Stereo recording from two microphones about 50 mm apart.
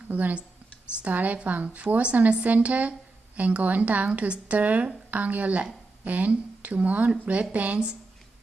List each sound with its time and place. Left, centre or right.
0.1 s a woman's voice: right